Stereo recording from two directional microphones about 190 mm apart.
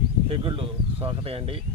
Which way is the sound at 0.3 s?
30° right (ahead or behind).